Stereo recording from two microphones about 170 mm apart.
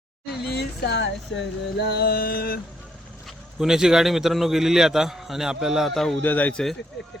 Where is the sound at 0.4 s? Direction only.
75° left (ahead or behind); by 2.6 s 60° left (ahead or behind).